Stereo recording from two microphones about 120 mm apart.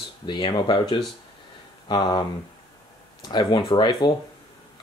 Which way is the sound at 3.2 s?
35° left (ahead or behind).